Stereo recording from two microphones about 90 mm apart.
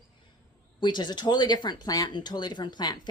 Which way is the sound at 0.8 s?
55° left (ahead or behind).